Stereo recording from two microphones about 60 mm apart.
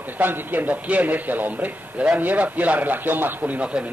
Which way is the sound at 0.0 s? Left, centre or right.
Right.